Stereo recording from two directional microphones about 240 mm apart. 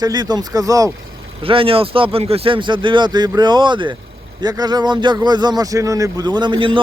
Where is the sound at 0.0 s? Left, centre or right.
Centre.